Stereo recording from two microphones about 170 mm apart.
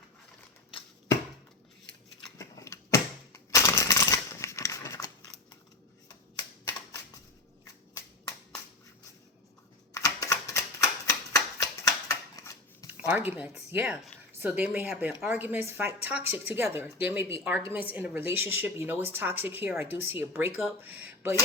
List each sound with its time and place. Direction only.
2.4 s typewriter: 15° left (ahead or behind)
9.9 s typewriter: 20° left (ahead or behind)
11.0 s shuffling cards: 20° left (ahead or behind)
13.1 s speech: 10° right (ahead or behind)